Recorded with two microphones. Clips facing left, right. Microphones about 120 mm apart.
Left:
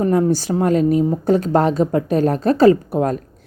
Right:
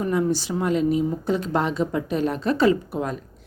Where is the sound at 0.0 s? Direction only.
40° left (ahead or behind).